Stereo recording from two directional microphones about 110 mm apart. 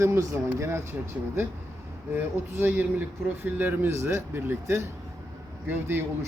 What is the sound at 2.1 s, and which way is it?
Speech, 15° right (ahead or behind).